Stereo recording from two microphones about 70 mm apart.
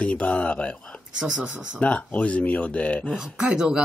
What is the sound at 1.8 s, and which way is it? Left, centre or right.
Speech, centre.